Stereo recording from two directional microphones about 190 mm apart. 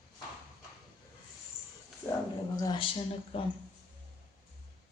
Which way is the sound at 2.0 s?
15° left (ahead or behind).